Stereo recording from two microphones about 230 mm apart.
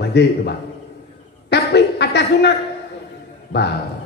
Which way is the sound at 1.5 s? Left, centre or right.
Left.